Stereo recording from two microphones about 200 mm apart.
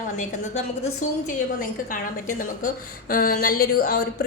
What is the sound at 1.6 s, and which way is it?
A woman's voice, 40° left (ahead or behind).